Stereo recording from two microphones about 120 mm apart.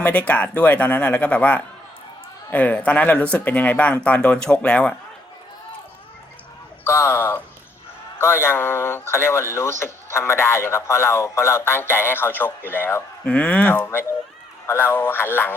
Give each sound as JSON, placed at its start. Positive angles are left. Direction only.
{"t": 0.0, "sound": "speech", "side_deg": 15}
{"t": 6.8, "sound": "speech", "side_deg": 20}